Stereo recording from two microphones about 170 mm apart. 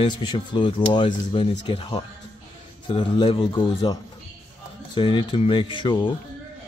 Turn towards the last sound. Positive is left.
turn(degrees=30)  # may be behind; listen again after turning